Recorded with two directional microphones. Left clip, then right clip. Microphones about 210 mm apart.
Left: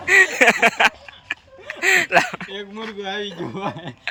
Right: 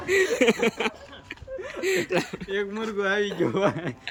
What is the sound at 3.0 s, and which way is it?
Speech, 25° right (ahead or behind).